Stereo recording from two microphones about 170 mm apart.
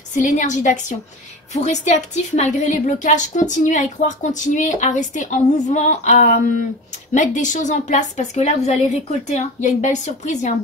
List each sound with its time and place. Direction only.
0.1 s a woman's voice: 45° left (ahead or behind)